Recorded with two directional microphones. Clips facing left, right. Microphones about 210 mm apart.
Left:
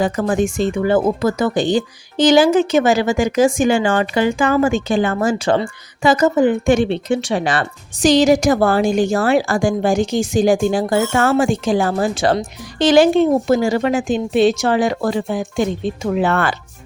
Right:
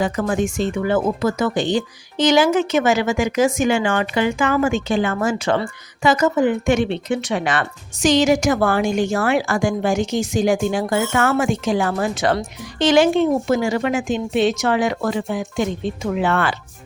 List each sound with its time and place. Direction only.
0.0 s speech: 35° left (ahead or behind)